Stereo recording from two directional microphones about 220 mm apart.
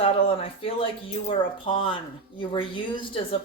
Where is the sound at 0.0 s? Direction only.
25° left (ahead or behind).